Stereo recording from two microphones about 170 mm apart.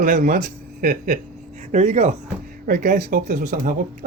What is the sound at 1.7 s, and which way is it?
Speech, 40° right (ahead or behind).